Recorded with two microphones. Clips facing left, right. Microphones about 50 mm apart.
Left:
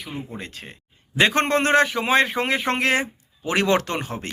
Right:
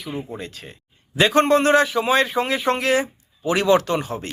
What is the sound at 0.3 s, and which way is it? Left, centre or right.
A man's voice, left.